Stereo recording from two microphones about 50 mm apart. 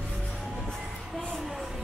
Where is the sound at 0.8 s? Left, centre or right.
Centre.